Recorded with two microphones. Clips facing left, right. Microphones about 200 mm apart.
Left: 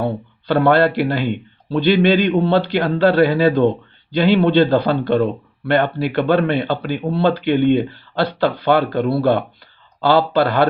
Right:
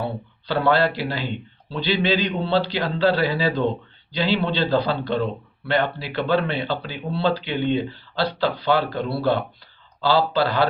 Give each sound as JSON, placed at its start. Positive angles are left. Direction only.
{"t": 0.0, "sound": "a man's voice", "side_deg": 55}